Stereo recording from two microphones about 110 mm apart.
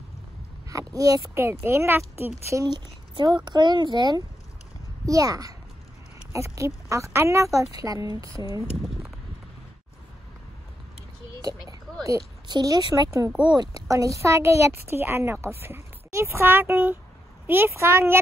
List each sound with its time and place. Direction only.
0.7 s a woman's voice: 30° right (ahead or behind)
2.6 s speech: 40° right (ahead or behind)
5.0 s a woman's voice: 30° right (ahead or behind)
8.8 s a sound: centre (ahead or behind)
11.4 s a sound: 30° right (ahead or behind)
12.4 s speech: 40° right (ahead or behind)
13.3 s speech: 10° right (ahead or behind)
13.6 s a woman's voice: 30° right (ahead or behind)